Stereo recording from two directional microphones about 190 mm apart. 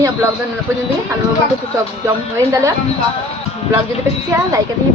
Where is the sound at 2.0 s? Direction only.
15° right (ahead or behind).